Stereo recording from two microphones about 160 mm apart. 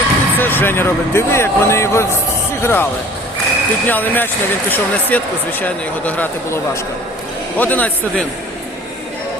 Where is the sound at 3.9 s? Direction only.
10° left (ahead or behind).